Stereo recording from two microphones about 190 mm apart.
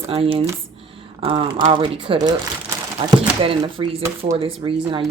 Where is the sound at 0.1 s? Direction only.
30° right (ahead or behind).